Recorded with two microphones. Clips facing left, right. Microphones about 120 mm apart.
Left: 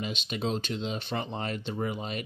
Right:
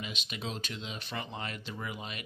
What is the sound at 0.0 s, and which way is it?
Speech, 35° left (ahead or behind).